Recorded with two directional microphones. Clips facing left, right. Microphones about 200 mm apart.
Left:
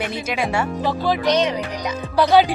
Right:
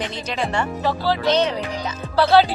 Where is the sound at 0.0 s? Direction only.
10° left (ahead or behind).